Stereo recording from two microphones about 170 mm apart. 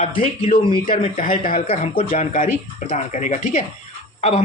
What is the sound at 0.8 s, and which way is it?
Speech, 50° left (ahead or behind).